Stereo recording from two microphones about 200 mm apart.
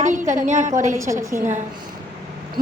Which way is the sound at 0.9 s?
15° right (ahead or behind).